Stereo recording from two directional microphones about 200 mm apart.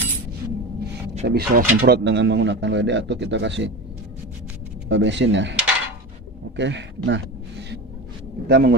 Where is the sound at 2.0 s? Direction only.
60° right (ahead or behind).